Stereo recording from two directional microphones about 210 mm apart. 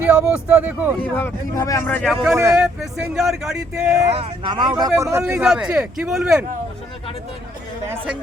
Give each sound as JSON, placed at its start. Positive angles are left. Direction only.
{"t": 0.0, "sound": "speech", "side_deg": -5}
{"t": 1.1, "sound": "speech", "side_deg": 15}
{"t": 2.2, "sound": "speech", "side_deg": -10}
{"t": 4.1, "sound": "speech", "side_deg": -25}